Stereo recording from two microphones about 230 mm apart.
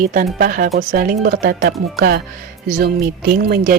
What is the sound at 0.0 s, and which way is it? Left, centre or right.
Speech, right.